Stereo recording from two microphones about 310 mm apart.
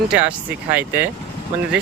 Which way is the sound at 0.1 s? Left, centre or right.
Centre.